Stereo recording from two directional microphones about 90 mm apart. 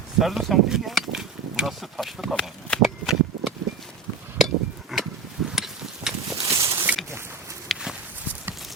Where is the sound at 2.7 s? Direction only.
10° left (ahead or behind).